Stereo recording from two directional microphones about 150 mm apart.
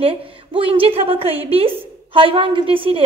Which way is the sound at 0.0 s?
40° right (ahead or behind).